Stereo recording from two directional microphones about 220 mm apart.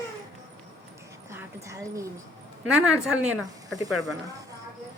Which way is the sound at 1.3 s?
10° right (ahead or behind).